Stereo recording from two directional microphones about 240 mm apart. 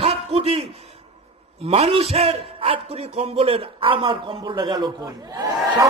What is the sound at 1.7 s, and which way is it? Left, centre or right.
A man's voice, right.